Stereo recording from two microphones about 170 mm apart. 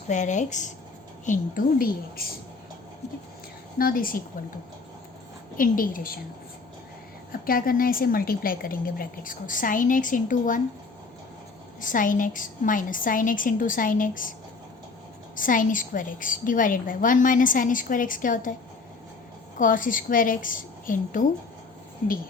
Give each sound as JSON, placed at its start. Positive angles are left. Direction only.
{"t": 0.1, "sound": "a woman's voice", "side_deg": 45}
{"t": 3.8, "sound": "a woman's voice", "side_deg": 60}
{"t": 5.5, "sound": "a woman's voice", "side_deg": 55}
{"t": 7.4, "sound": "a woman's voice", "side_deg": 60}
{"t": 11.8, "sound": "a woman's voice", "side_deg": 50}
{"t": 15.4, "sound": "a woman's voice", "side_deg": 50}
{"t": 19.5, "sound": "a woman's voice", "side_deg": 50}